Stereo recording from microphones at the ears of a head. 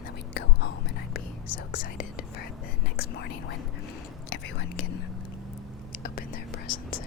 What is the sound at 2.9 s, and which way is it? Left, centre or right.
Speech, left.